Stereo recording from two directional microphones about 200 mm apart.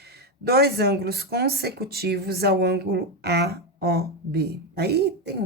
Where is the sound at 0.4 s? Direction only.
50° right (ahead or behind).